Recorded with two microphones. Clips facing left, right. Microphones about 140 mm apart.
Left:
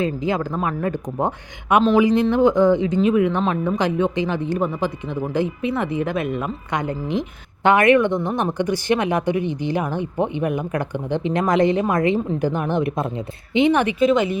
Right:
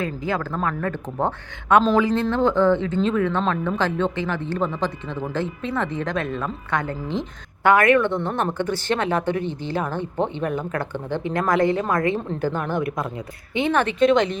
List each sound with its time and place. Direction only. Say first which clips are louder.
0.0 s speech: left 4 dB; 20° left (ahead or behind)
14.0 s speech: right 2 dB; 5° left (ahead or behind)